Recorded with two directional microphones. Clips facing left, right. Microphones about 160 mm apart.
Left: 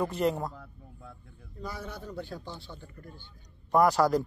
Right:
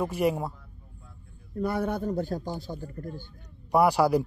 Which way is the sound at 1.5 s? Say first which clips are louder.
Right 12 dB; 60° right (ahead or behind).